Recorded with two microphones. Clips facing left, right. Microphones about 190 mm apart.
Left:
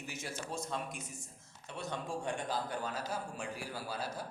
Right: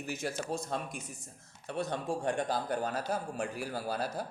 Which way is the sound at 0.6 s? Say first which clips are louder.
Right 3 dB; 55° right (ahead or behind).